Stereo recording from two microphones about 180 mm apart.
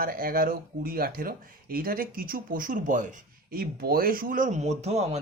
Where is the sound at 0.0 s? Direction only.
55° right (ahead or behind).